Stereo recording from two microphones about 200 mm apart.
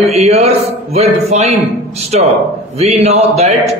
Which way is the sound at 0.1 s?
30° right (ahead or behind).